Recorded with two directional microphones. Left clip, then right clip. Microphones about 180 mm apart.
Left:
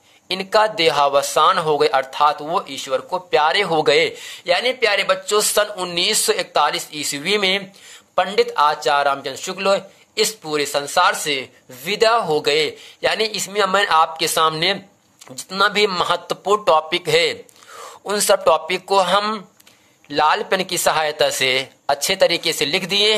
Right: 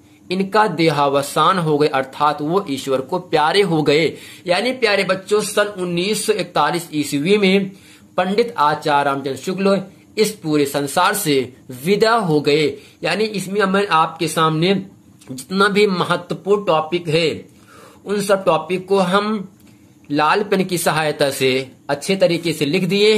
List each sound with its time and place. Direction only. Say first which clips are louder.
0.3 s speech: even; 25° left (ahead or behind)
6.5 s speech: even; 25° left (ahead or behind)
16.3 s speech: left 2 dB; 45° left (ahead or behind)